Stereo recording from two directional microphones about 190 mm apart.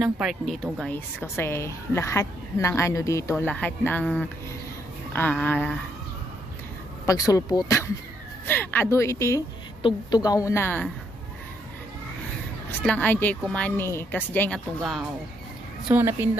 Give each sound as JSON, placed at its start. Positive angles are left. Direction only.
{"t": 0.0, "sound": "a woman's voice", "side_deg": 0}
{"t": 7.0, "sound": "a woman's voice", "side_deg": 20}
{"t": 12.8, "sound": "a woman's voice", "side_deg": 5}
{"t": 15.9, "sound": "a woman's voice", "side_deg": -10}